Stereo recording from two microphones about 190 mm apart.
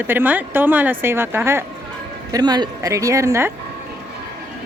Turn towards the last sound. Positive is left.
turn(degrees=-15)  # may be behind; listen again after turning